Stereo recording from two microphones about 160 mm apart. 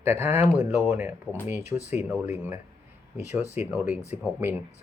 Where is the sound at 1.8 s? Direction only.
45° left (ahead or behind).